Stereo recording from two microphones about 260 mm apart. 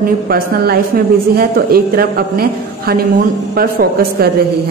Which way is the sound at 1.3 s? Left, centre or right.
Right.